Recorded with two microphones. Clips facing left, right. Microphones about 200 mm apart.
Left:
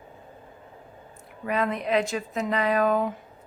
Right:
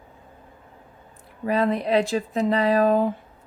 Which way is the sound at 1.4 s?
35° right (ahead or behind).